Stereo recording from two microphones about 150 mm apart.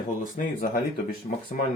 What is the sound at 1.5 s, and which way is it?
Speech, 65° left (ahead or behind).